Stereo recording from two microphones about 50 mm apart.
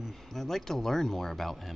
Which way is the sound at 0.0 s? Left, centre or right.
Centre.